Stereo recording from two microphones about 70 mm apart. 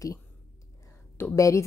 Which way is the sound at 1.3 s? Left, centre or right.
Left.